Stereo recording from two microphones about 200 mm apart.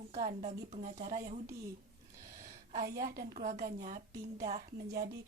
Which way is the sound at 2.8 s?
50° right (ahead or behind).